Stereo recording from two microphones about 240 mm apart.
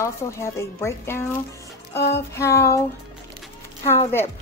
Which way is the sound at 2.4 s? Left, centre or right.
Centre.